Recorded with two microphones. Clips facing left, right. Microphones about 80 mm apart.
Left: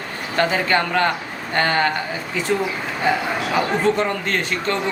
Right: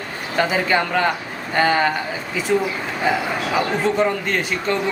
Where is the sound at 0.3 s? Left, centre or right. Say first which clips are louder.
Even; centre.